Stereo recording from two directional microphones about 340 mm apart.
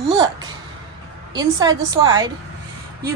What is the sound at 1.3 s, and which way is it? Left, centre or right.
A woman's voice, centre.